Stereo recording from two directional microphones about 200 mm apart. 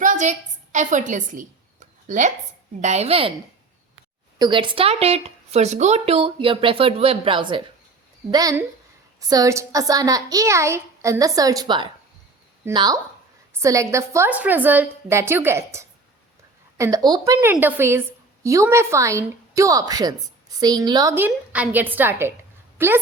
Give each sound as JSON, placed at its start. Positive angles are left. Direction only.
{"t": 0.0, "sound": "a sound", "side_deg": -40}
{"t": 2.8, "sound": "a woman's voice", "side_deg": -35}
{"t": 4.4, "sound": "a woman's voice", "side_deg": -25}